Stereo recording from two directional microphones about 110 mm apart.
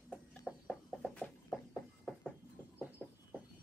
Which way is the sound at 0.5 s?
5° right (ahead or behind).